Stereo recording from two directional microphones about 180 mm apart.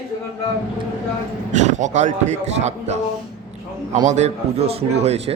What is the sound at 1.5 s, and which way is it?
A man's voice, 40° right (ahead or behind).